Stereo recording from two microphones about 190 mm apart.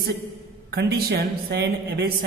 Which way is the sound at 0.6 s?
55° right (ahead or behind).